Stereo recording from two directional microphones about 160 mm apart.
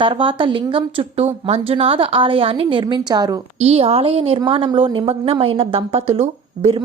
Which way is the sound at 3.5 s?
40° right (ahead or behind).